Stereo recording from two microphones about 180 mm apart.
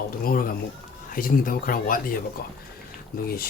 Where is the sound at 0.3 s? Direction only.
55° left (ahead or behind).